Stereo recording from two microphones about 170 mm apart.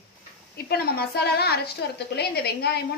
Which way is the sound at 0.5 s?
65° left (ahead or behind).